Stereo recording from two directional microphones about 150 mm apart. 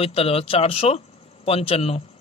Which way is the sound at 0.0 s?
40° left (ahead or behind).